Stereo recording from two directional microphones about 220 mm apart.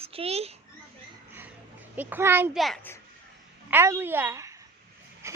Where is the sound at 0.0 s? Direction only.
25° right (ahead or behind).